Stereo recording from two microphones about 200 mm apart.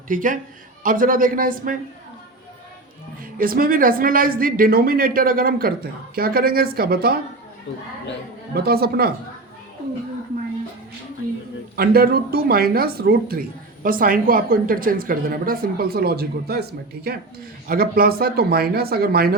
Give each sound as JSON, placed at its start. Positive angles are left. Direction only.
{"t": 0.1, "sound": "speech", "side_deg": -40}
{"t": 3.3, "sound": "speech", "side_deg": -45}
{"t": 8.5, "sound": "speech", "side_deg": -50}
{"t": 11.8, "sound": "speech", "side_deg": -50}